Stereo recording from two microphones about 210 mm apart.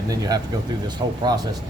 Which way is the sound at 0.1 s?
15° right (ahead or behind).